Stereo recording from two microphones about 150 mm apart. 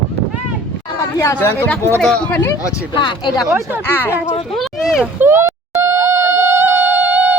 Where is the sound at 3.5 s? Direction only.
15° right (ahead or behind).